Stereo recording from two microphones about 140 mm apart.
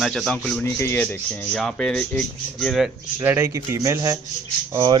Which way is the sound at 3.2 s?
15° right (ahead or behind).